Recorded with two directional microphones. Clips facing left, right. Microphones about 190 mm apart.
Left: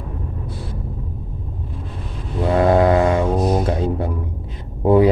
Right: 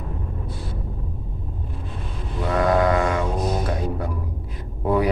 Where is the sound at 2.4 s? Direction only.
30° left (ahead or behind).